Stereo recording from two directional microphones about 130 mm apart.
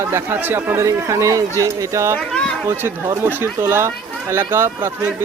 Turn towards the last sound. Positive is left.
turn(degrees=-20)  # may be behind; listen again after turning